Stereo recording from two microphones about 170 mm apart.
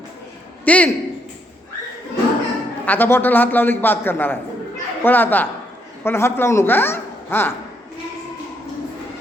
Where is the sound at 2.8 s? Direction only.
10° left (ahead or behind).